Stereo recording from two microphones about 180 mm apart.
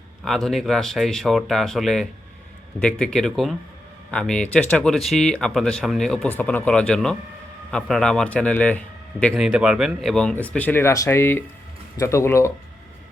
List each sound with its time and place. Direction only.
0.3 s speech: centre (ahead or behind)